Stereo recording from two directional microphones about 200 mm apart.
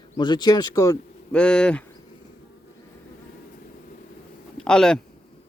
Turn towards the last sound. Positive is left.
turn(degrees=5)  # may be behind; listen again after turning